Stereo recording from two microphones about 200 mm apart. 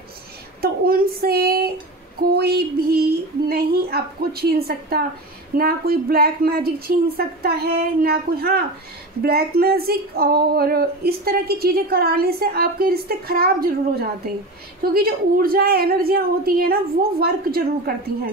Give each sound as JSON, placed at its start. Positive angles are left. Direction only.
{"t": 0.6, "sound": "a sound", "side_deg": -50}
{"t": 2.1, "sound": "female singing", "side_deg": -50}
{"t": 5.6, "sound": "speech", "side_deg": -50}